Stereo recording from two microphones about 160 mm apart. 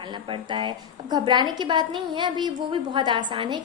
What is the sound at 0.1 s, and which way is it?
A woman's voice, 30° right (ahead or behind).